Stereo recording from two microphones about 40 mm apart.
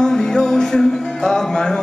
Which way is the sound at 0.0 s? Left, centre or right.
Centre.